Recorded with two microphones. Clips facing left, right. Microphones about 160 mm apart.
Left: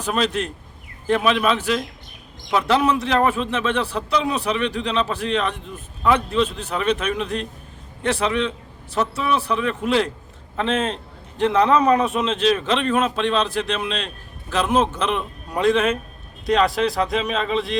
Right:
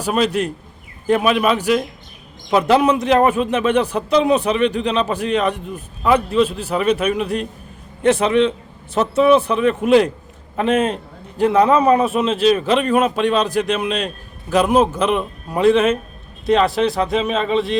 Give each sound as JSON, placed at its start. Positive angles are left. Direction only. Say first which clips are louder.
{"t": 0.0, "sound": "a man's voice", "louder": "right 4 dB", "side_deg": -10}
{"t": 8.0, "sound": "a man's voice", "louder": "right 7 dB", "side_deg": -20}